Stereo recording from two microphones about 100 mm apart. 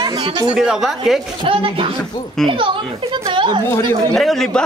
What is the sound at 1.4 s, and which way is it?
Speech, 65° right (ahead or behind).